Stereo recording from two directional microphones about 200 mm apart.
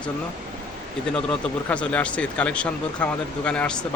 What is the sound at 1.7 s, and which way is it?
Speech, 5° left (ahead or behind).